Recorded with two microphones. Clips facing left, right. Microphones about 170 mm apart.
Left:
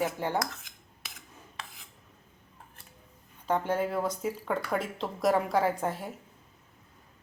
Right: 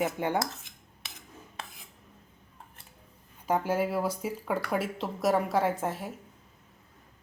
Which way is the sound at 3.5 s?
5° right (ahead or behind).